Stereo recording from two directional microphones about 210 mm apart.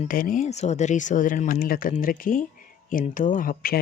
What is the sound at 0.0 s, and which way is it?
Speech, 40° left (ahead or behind).